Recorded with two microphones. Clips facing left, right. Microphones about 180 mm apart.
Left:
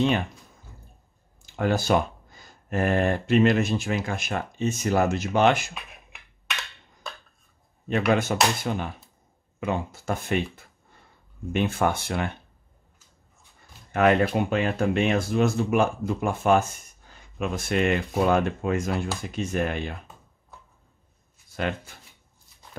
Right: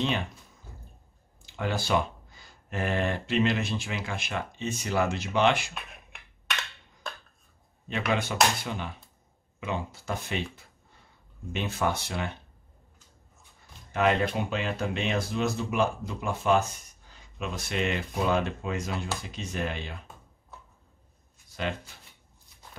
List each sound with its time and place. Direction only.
1.4 s speech: 45° left (ahead or behind)
5.8 s a sound: centre (ahead or behind)
8.1 s speech: 45° left (ahead or behind)
13.9 s speech: 55° left (ahead or behind)
21.6 s speech: 50° left (ahead or behind)